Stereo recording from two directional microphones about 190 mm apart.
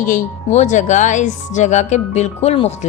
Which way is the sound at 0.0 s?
40° left (ahead or behind).